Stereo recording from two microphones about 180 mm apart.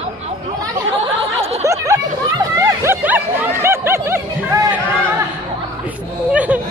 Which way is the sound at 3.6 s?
15° right (ahead or behind).